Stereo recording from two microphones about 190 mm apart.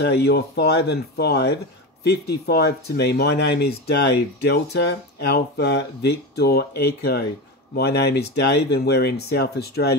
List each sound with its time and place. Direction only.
0.0 s speech: 60° left (ahead or behind)